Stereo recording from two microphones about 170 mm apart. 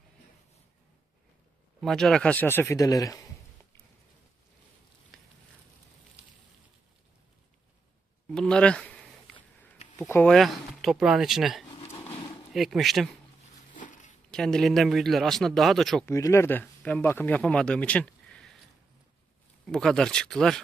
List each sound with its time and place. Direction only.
1.8 s speech: centre (ahead or behind); by 3.2 s 20° left (ahead or behind)
5.1 s sizzle: centre (ahead or behind)
8.3 s speech: 5° left (ahead or behind)
10.0 s speech: 10° left (ahead or behind)
10.3 s speech: centre (ahead or behind)
13.7 s zipper: 50° left (ahead or behind)
14.3 s speech: 5° left (ahead or behind)
16.1 s speech: 15° left (ahead or behind)
19.6 s speech: centre (ahead or behind)